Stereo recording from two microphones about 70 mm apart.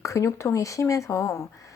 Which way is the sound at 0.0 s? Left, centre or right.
Left.